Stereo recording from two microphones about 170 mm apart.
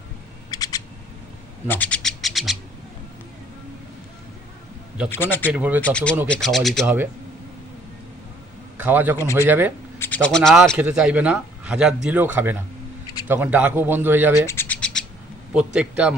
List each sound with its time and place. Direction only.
0.5 s camera: 20° left (ahead or behind)
1.6 s bird: 10° left (ahead or behind)
5.1 s speech: 10° left (ahead or behind)
5.5 s speech: 10° right (ahead or behind)
5.8 s speech: 5° left (ahead or behind)
6.8 s speech: 10° right (ahead or behind)
8.8 s a man's voice: 10° right (ahead or behind)
10.0 s speech: 10° left (ahead or behind); by 14.4 s 10° right (ahead or behind)
14.4 s a sound: 15° left (ahead or behind)
15.5 s speech: 5° right (ahead or behind)